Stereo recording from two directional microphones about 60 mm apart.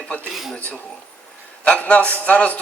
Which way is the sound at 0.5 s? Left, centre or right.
Centre.